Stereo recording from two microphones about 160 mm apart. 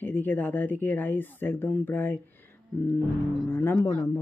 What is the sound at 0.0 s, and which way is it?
Speech, 10° left (ahead or behind).